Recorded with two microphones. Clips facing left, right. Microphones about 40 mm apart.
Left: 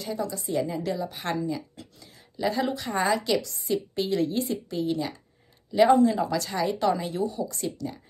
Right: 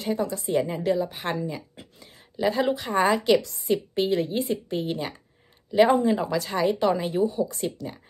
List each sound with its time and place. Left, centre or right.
0.0 s a woman's voice: right; by 3.0 s centre
3.0 s a woman's voice: right